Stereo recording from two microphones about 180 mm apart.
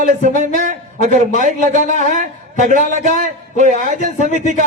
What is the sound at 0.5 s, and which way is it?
A man's voice, 45° right (ahead or behind).